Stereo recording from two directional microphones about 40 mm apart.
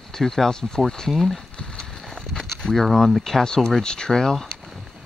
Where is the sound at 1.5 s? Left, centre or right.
Centre.